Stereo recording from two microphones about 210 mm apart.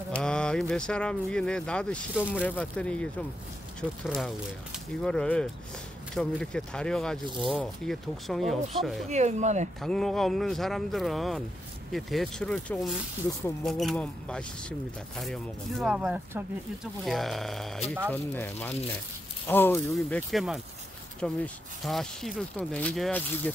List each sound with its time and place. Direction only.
0.2 s speech: 5° left (ahead or behind)
9.1 s speech: 35° right (ahead or behind)
9.8 s speech: centre (ahead or behind)